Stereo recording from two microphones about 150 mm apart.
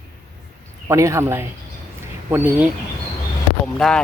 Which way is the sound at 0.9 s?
20° right (ahead or behind).